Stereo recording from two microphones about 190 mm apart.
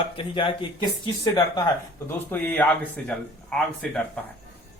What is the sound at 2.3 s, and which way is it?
Speech, 10° left (ahead or behind).